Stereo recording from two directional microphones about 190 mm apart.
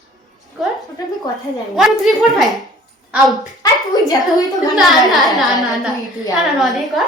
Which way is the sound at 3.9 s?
20° left (ahead or behind).